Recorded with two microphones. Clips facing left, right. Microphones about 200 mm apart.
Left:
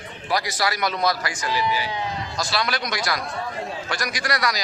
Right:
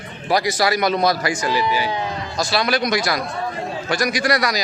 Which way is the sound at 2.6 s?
15° right (ahead or behind).